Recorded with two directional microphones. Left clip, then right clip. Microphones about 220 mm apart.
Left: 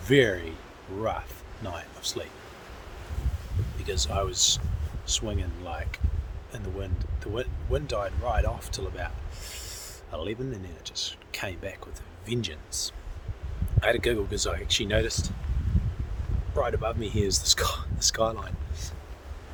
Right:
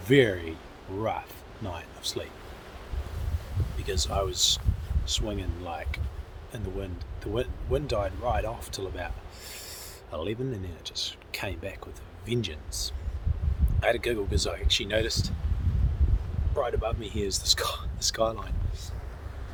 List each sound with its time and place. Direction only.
0.0 s speech: centre (ahead or behind)
1.6 s speech: centre (ahead or behind)
3.8 s speech: centre (ahead or behind)
16.6 s speech: 10° left (ahead or behind)